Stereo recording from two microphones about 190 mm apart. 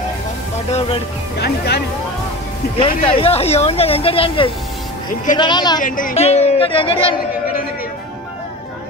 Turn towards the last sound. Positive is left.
turn(degrees=30)  # may be behind; listen again after turning